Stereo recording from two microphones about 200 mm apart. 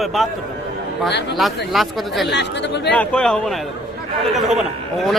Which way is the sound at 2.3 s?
60° left (ahead or behind).